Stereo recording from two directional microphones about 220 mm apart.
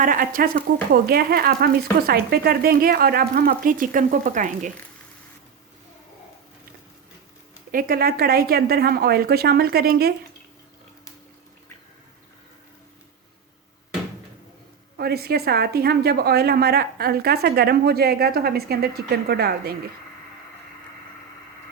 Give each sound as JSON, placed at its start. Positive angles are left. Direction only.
{"t": 0.0, "sound": "a woman's voice", "side_deg": -40}
{"t": 7.7, "sound": "a woman's voice", "side_deg": -40}
{"t": 14.9, "sound": "a woman's voice", "side_deg": -45}